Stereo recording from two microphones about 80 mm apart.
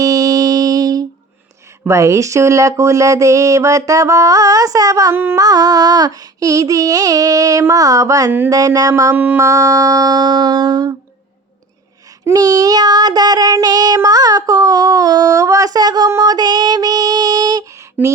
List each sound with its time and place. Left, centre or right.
0.0 s music: right
1.8 s speech: right
5.1 s a sound: right
5.4 s child singing: right
9.1 s a sound: right
9.4 s child singing: right
12.2 s child singing: right
16.0 s female singing: right
18.0 s a sound: centre